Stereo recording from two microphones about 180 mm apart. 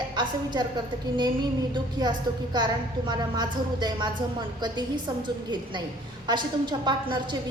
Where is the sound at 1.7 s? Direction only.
25° right (ahead or behind).